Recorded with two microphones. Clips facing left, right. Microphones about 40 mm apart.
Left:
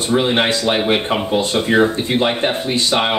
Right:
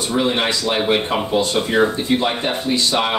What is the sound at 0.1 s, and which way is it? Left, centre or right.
Speech, left.